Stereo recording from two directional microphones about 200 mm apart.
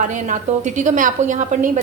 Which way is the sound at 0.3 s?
40° right (ahead or behind).